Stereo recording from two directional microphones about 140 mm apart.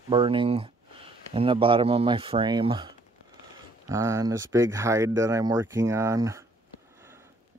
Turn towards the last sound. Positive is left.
turn(degrees=-20)  # may be behind; listen again after turning